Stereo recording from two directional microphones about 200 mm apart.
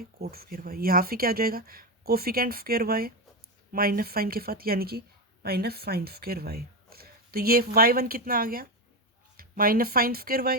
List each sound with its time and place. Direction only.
0.0 s a woman's voice: 50° right (ahead or behind)